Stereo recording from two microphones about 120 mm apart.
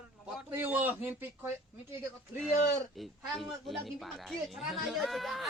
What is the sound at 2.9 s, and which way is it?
A woman's voice, centre (ahead or behind).